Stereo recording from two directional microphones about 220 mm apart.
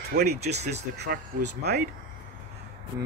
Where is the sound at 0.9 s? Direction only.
50° right (ahead or behind).